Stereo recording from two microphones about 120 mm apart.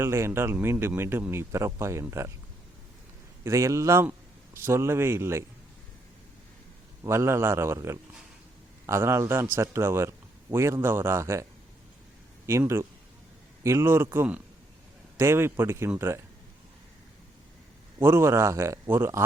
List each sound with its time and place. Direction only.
0.0 s a man's voice: 20° right (ahead or behind)
3.4 s a man's voice: 25° right (ahead or behind)
7.0 s a man's voice: 25° right (ahead or behind)
12.5 s a man's voice: 20° right (ahead or behind)
18.0 s a man's voice: 20° right (ahead or behind)